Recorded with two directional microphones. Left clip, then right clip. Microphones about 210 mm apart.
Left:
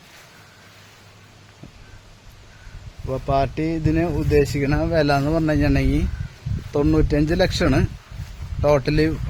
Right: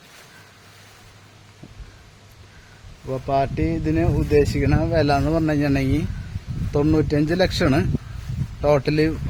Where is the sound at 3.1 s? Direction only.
Centre (ahead or behind).